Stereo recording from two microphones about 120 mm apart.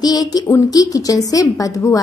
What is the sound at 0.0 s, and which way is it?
A woman's voice, 35° left (ahead or behind).